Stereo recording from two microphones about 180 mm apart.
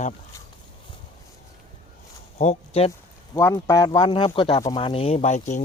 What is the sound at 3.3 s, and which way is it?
Speech, 20° left (ahead or behind).